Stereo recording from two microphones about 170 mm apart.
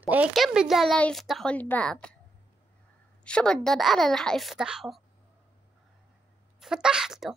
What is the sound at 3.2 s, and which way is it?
Speech, 5° left (ahead or behind).